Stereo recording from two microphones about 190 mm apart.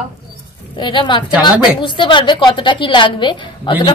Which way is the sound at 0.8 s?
25° left (ahead or behind).